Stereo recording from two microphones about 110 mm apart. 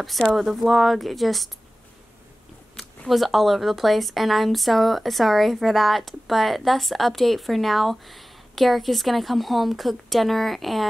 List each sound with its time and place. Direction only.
0.0 s speech: centre (ahead or behind)
2.7 s speech: 5° left (ahead or behind)